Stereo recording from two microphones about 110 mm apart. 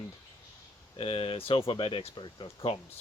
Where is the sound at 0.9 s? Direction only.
55° left (ahead or behind).